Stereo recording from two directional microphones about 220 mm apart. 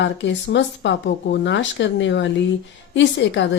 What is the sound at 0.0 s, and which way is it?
Speech, 55° left (ahead or behind).